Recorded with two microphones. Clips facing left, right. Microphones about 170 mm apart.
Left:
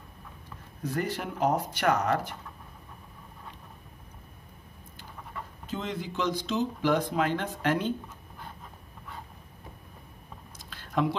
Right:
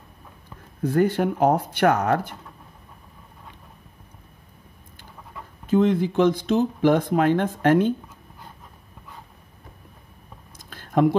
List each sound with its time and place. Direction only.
0.8 s speech: 55° right (ahead or behind)
5.7 s speech: 55° right (ahead or behind)
10.7 s a sound: 50° right (ahead or behind)